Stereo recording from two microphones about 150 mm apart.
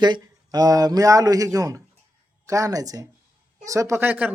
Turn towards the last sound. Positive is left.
turn(degrees=-10)  # may be behind; listen again after turning